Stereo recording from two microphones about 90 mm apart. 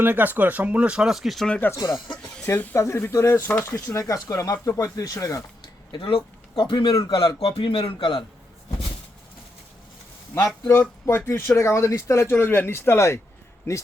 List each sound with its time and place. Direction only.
0.0 s speech: 20° right (ahead or behind); by 1.5 s centre (ahead or behind)
1.7 s speech: 45° left (ahead or behind)
2.5 s speech: 20° left (ahead or behind)
2.7 s speech: 30° left (ahead or behind)
5.9 s speech: 80° left
6.9 s speech: 40° left (ahead or behind)
7.4 s a man's voice: 90° left; by 8.2 s 65° left (ahead or behind)
11.3 s speech: 30° left (ahead or behind)